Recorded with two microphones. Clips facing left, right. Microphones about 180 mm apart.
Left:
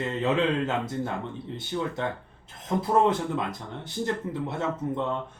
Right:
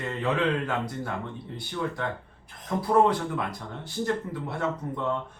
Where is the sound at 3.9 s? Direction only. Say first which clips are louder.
Right 1 dB; 20° left (ahead or behind).